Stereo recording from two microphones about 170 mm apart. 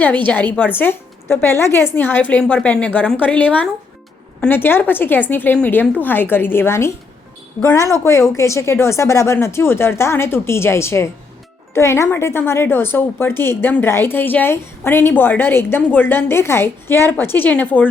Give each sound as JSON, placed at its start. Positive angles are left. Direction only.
{"t": 0.3, "sound": "a woman's voice", "side_deg": 10}